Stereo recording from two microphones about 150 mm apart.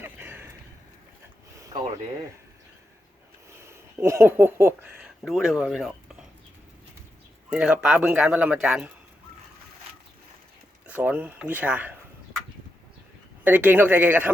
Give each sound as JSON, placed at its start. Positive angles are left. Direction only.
{"t": 0.0, "sound": "a sound", "side_deg": -15}
{"t": 1.5, "sound": "a sound", "side_deg": -20}
{"t": 3.6, "sound": "speech", "side_deg": -20}
{"t": 4.9, "sound": "speech", "side_deg": -5}
{"t": 7.5, "sound": "a man's voice", "side_deg": -5}
{"t": 10.8, "sound": "a man's voice", "side_deg": -10}
{"t": 13.4, "sound": "a man's voice", "side_deg": -10}